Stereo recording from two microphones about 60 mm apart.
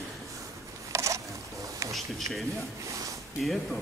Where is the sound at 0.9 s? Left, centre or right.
Right.